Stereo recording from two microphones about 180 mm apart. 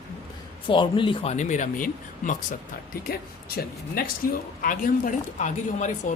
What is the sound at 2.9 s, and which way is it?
Speech, 55° left (ahead or behind).